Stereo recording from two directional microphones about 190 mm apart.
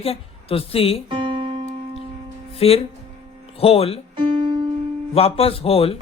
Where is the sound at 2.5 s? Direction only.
30° left (ahead or behind).